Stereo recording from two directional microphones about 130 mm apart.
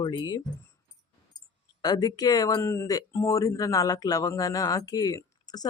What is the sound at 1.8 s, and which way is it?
Speech, 30° left (ahead or behind).